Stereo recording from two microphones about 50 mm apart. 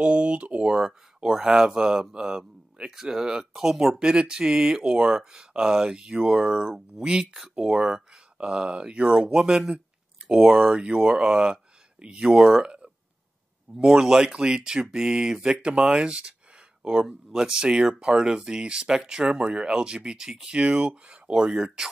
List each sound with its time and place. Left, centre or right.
0.0 s speech: right
0.7 s speech: centre
12.6 s a sound: right
13.8 s speech: centre